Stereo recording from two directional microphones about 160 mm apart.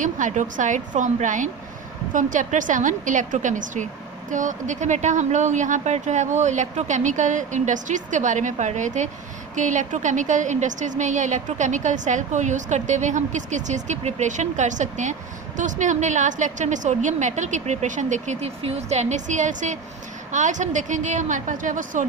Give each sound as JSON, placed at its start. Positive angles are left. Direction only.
{"t": 0.0, "sound": "a woman's voice", "side_deg": -50}